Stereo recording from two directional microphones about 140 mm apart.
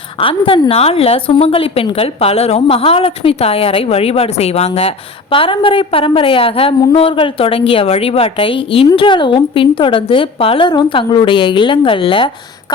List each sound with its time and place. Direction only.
0.2 s a woman's voice: 40° left (ahead or behind)